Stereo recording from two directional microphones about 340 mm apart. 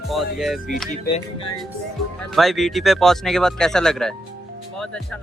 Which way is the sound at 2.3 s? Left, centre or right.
Centre.